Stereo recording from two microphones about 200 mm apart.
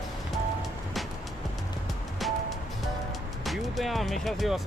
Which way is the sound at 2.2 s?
Centre (ahead or behind).